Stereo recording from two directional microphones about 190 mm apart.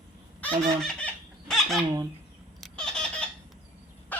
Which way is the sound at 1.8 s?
20° right (ahead or behind).